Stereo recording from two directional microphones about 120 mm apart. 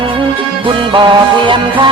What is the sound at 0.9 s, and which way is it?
Music, 45° right (ahead or behind).